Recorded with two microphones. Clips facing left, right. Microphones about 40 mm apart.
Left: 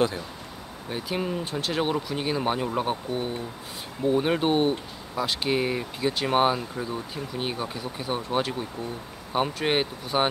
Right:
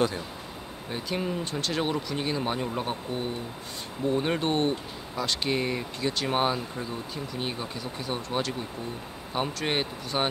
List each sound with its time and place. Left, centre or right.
0.8 s speech: centre